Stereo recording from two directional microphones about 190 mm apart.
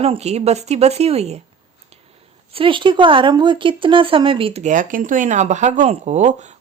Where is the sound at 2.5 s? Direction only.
25° right (ahead or behind).